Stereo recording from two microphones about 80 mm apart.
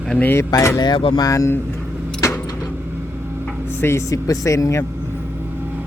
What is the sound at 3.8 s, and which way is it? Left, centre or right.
Speech, left.